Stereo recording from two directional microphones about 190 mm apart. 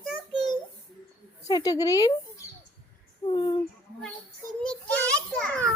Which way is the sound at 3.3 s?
25° left (ahead or behind).